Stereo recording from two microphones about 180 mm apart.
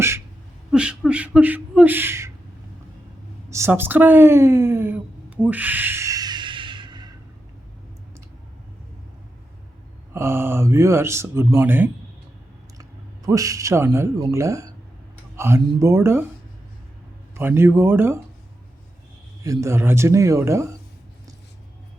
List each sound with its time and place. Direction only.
0.7 s speech: 5° right (ahead or behind)
3.5 s speech: 15° right (ahead or behind)
5.4 s a sound: 10° right (ahead or behind); by 7.1 s 25° right (ahead or behind)
10.2 s speech: 15° right (ahead or behind)
13.2 s speech: 20° right (ahead or behind)
17.3 s speech: 15° right (ahead or behind)
19.4 s speech: 15° right (ahead or behind)